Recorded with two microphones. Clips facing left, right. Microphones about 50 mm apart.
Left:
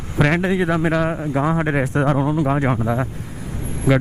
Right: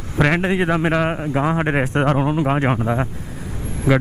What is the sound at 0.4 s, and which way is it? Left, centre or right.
Speech, right.